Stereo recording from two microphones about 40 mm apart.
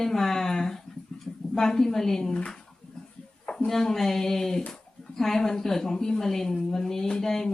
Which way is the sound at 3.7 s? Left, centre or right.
Centre.